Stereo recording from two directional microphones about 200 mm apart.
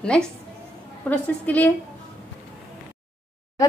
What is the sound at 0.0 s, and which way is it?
A woman's voice, 5° left (ahead or behind).